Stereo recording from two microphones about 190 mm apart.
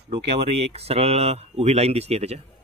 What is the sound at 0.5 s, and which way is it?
Speech, 30° right (ahead or behind).